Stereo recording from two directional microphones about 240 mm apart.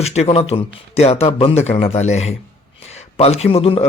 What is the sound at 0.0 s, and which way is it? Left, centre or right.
A man's voice, left.